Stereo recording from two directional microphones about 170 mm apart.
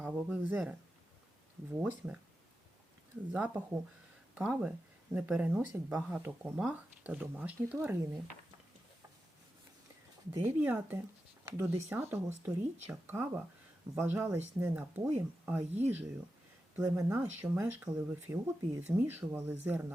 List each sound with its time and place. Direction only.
0.0 s a sound: 10° right (ahead or behind)
1.7 s speech: 10° right (ahead or behind)
3.3 s speech: 10° right (ahead or behind)
10.4 s speech: 15° right (ahead or behind)
16.8 s speech: 20° right (ahead or behind)